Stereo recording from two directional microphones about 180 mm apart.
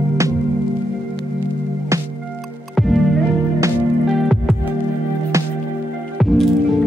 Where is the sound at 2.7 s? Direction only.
Centre (ahead or behind).